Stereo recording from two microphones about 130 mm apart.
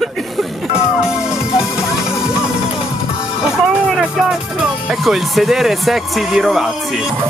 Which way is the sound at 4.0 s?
5° right (ahead or behind).